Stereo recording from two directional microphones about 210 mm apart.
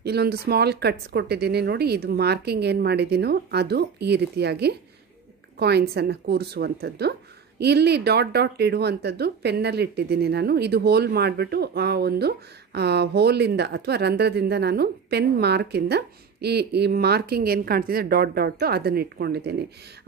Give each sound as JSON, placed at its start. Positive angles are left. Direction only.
{"t": 0.0, "sound": "speech", "side_deg": -50}